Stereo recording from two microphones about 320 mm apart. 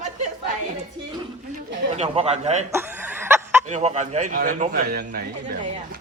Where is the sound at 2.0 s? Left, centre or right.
Centre.